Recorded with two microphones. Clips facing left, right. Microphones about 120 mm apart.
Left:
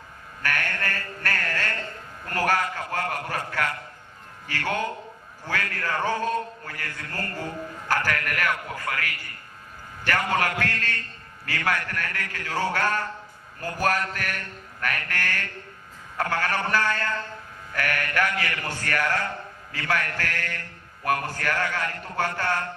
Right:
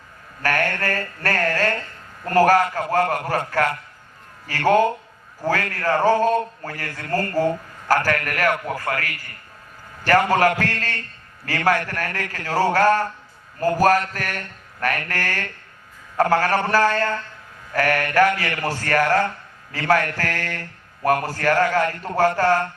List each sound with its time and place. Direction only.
0.4 s a man's voice: 40° right (ahead or behind)